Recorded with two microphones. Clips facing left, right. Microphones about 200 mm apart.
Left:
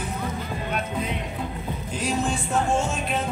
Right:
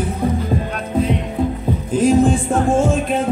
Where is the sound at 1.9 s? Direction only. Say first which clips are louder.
Right 13 dB; 50° right (ahead or behind).